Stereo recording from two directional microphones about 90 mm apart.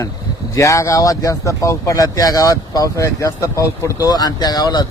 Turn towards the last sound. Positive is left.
turn(degrees=55)  # may be behind; listen again after turning